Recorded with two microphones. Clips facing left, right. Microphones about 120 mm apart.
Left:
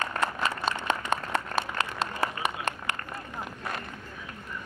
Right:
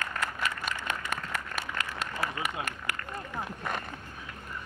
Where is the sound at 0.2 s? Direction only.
25° left (ahead or behind).